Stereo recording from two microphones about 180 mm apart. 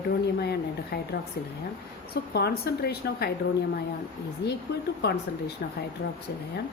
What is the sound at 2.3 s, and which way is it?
A woman's voice, 65° left (ahead or behind).